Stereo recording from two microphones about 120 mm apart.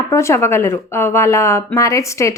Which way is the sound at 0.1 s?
20° left (ahead or behind).